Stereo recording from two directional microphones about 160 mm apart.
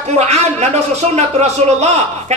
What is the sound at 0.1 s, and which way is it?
A man's voice, 45° right (ahead or behind).